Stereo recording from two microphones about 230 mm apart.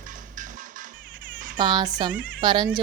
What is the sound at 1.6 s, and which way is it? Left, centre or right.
Speech, centre.